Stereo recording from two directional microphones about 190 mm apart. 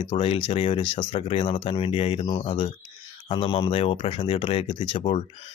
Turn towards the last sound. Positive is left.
turn(degrees=30)  # may be behind; listen again after turning